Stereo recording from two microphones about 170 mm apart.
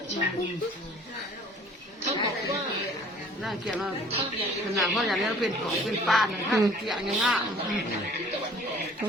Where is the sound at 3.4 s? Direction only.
Centre (ahead or behind).